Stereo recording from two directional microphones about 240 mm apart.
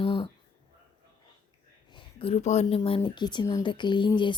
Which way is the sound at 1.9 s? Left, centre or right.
Left.